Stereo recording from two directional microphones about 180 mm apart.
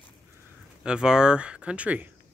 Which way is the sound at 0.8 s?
5° right (ahead or behind).